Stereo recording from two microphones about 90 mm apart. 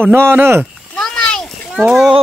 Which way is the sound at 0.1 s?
25° right (ahead or behind).